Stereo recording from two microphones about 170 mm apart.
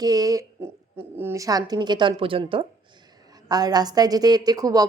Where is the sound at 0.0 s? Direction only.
20° right (ahead or behind).